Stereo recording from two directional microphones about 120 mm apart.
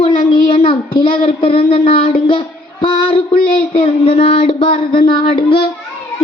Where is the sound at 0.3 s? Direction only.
45° left (ahead or behind).